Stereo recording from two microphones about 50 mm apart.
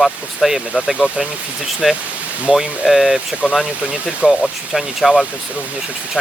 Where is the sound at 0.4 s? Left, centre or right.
Centre.